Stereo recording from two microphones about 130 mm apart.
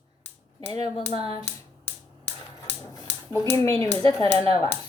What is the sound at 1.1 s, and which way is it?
Hands, 45° right (ahead or behind).